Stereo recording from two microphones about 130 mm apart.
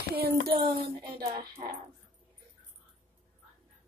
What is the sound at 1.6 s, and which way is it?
Speech, 55° right (ahead or behind).